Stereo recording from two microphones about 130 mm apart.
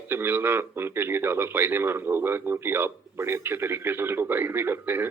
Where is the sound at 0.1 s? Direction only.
15° right (ahead or behind).